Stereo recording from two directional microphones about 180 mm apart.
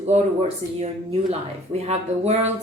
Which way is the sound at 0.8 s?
35° right (ahead or behind).